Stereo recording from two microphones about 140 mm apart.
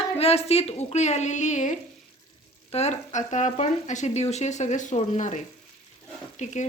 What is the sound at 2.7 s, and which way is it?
Speech, 50° left (ahead or behind).